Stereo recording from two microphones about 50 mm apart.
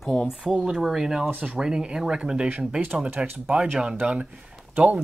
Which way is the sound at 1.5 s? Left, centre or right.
Centre.